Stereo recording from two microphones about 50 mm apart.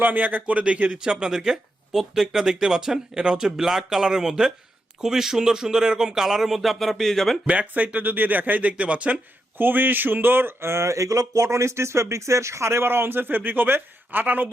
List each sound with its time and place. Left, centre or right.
0.0 s speech: right; by 7.3 s centre
7.4 s speech: right
9.6 s speech: right
12.9 s speech: right